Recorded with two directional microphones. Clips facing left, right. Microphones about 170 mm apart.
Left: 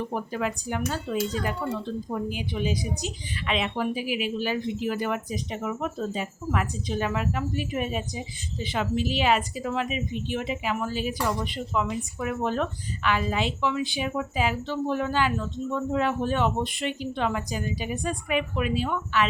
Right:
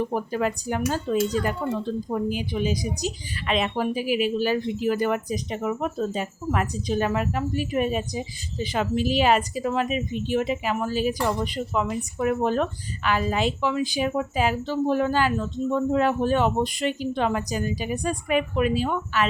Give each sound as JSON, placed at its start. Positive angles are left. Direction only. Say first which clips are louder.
{"t": 0.1, "sound": "speech", "louder": "right 4 dB", "side_deg": -40}